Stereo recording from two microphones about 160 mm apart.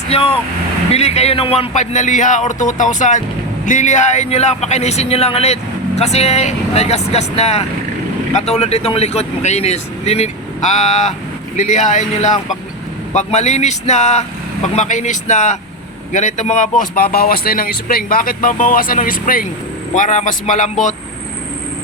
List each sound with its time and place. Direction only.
0.1 s speech: 35° left (ahead or behind); by 19.5 s 60° left (ahead or behind)
19.9 s speech: 50° left (ahead or behind)